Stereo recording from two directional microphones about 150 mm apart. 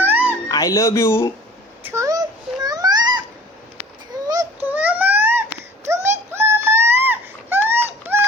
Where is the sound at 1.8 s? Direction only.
20° right (ahead or behind).